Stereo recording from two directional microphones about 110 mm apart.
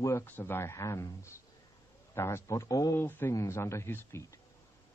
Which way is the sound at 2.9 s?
20° left (ahead or behind).